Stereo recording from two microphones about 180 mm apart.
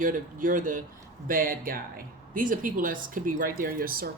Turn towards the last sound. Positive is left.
turn(degrees=-55)  # may be behind; listen again after turning